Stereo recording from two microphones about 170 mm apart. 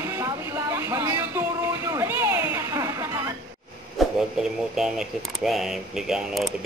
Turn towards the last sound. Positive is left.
turn(degrees=-5)  # may be behind; listen again after turning